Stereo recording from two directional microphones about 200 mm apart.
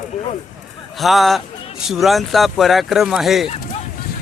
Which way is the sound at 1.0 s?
Centre (ahead or behind).